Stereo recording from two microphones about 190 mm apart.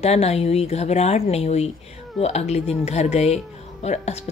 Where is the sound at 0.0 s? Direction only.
35° left (ahead or behind).